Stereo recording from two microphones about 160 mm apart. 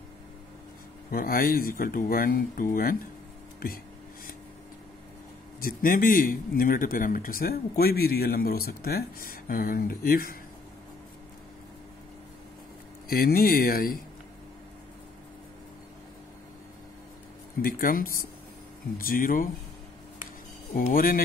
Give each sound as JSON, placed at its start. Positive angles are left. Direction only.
{"t": 1.1, "sound": "speech", "side_deg": 65}
{"t": 5.6, "sound": "speech", "side_deg": 65}
{"t": 13.1, "sound": "speech", "side_deg": 65}
{"t": 17.6, "sound": "speech", "side_deg": 65}
{"t": 20.7, "sound": "speech", "side_deg": 60}